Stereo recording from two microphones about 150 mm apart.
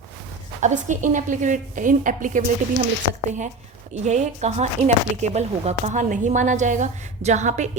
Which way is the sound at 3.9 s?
50° right (ahead or behind).